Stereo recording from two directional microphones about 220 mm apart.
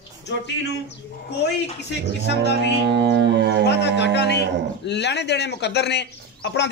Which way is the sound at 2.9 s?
50° right (ahead or behind).